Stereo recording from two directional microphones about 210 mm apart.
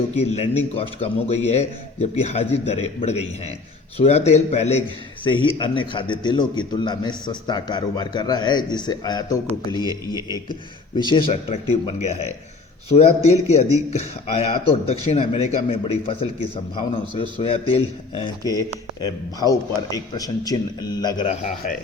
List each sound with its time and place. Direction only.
0.1 s a man's voice: 30° left (ahead or behind)
9.8 s a man's voice: 15° right (ahead or behind)
10.9 s a man's voice: 20° left (ahead or behind)
21.4 s a man's voice: 40° left (ahead or behind)